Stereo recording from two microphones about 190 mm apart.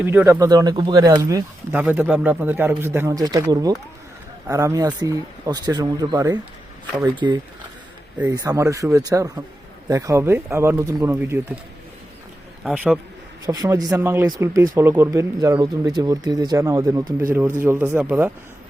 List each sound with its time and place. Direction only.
0.0 s speech: 10° right (ahead or behind)
12.6 s a man's voice: 5° right (ahead or behind)
13.4 s speech: 20° right (ahead or behind)